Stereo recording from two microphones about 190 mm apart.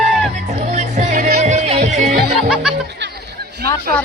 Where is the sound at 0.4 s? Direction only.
40° right (ahead or behind).